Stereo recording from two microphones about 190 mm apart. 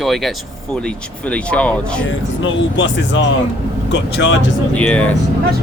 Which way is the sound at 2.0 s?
85° left.